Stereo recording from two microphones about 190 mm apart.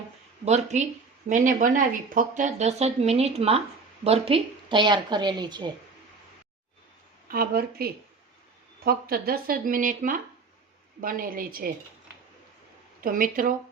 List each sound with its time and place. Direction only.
0.4 s a woman's voice: 35° right (ahead or behind)
7.3 s speech: 50° right (ahead or behind)
13.0 s speech: 45° right (ahead or behind)